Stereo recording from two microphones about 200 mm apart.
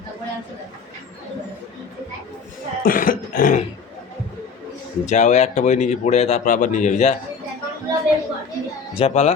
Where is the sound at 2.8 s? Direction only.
45° left (ahead or behind).